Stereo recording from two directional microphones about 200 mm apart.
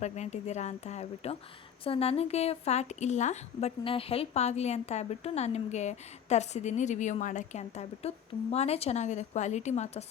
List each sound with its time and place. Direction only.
0.0 s speech: 35° left (ahead or behind)